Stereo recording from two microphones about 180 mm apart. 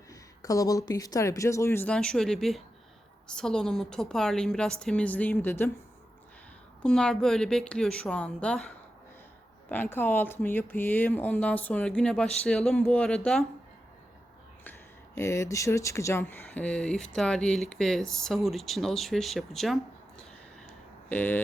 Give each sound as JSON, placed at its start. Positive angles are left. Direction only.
{"t": 0.1, "sound": "speech", "side_deg": 20}
{"t": 6.8, "sound": "speech", "side_deg": 5}
{"t": 14.6, "sound": "speech", "side_deg": 15}